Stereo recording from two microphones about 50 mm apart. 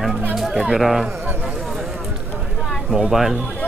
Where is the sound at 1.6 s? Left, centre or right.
Centre.